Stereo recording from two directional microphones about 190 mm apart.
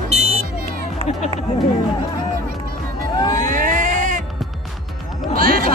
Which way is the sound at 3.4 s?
45° right (ahead or behind).